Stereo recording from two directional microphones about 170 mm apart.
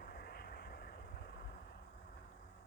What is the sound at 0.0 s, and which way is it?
Vehicle, 65° left (ahead or behind).